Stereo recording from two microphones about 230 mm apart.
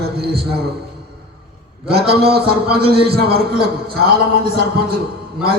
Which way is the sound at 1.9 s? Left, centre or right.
Right.